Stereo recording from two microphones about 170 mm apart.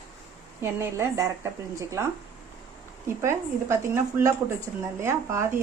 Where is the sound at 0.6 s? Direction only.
15° right (ahead or behind).